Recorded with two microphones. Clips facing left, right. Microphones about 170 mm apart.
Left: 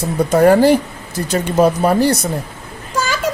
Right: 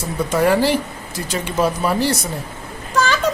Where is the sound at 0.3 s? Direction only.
45° left (ahead or behind).